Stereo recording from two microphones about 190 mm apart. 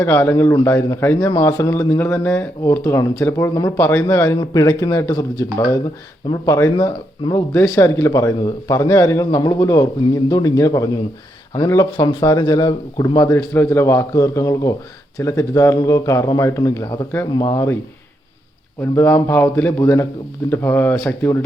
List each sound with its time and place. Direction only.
0.0 s speech: 10° left (ahead or behind)
18.8 s speech: 15° left (ahead or behind)